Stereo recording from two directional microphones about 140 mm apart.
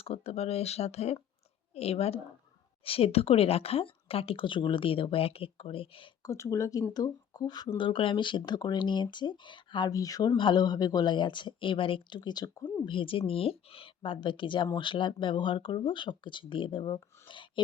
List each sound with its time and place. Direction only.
0.0 s speech: 45° left (ahead or behind)
6.2 s speech: 20° left (ahead or behind); by 17.6 s 35° left (ahead or behind)